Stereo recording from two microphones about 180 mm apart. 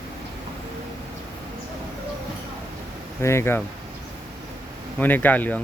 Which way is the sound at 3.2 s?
15° left (ahead or behind).